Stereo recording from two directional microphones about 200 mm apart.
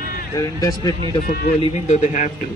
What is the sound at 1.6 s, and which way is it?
Speech, 35° left (ahead or behind).